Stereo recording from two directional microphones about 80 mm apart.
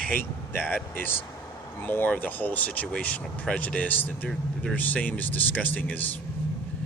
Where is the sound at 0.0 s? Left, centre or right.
Left.